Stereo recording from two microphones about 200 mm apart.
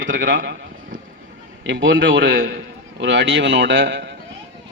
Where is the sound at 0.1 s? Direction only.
45° right (ahead or behind).